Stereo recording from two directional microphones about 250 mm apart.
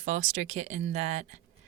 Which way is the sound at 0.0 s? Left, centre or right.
Right.